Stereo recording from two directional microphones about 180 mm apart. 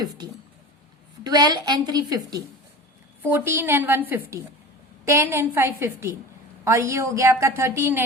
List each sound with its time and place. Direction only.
1.2 s a woman's voice: 20° right (ahead or behind)